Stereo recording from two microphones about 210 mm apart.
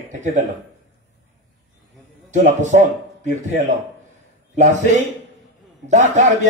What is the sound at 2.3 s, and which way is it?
A man's voice, 35° right (ahead or behind).